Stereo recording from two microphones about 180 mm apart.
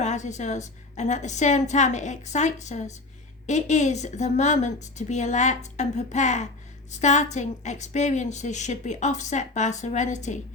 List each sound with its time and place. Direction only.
0.0 s a woman's voice: 40° left (ahead or behind)